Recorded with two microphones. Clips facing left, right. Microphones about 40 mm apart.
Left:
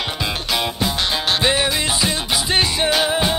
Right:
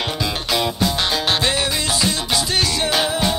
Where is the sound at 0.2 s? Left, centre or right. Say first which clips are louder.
Right 1 dB; centre.